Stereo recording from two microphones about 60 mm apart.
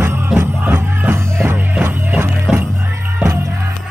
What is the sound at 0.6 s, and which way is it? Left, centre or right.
Music, right.